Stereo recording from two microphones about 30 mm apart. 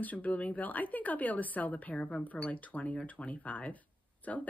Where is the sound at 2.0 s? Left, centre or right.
Left.